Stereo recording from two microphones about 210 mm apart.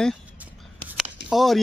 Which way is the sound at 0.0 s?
5° right (ahead or behind).